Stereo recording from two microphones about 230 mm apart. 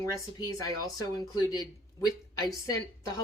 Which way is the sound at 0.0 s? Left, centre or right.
Centre.